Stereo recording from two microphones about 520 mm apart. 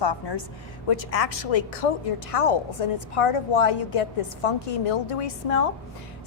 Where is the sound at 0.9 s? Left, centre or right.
Left.